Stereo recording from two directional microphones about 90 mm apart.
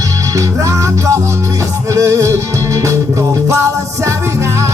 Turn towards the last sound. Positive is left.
turn(degrees=-30)  # may be behind; listen again after turning